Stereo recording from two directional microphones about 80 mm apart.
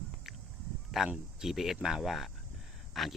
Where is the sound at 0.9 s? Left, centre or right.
Centre.